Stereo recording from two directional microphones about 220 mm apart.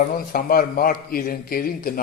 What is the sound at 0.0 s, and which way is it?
A man's voice, 40° left (ahead or behind).